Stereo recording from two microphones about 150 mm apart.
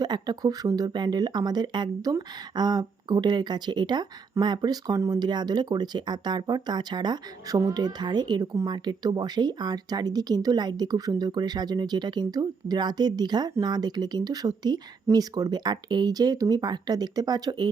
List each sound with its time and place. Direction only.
0.0 s speech: 25° right (ahead or behind)